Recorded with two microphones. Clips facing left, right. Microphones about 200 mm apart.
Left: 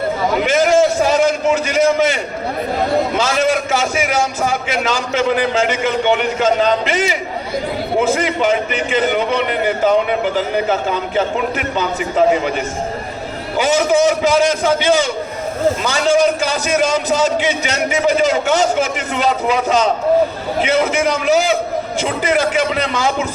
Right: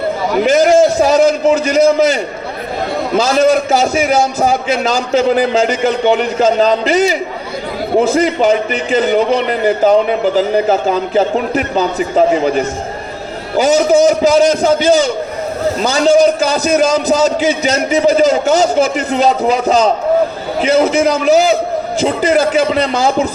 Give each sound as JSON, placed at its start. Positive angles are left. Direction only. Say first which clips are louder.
{"t": 0.4, "sound": "a man's voice", "louder": "right 5 dB", "side_deg": -40}
{"t": 3.2, "sound": "a man's voice", "louder": "right 5 dB", "side_deg": -40}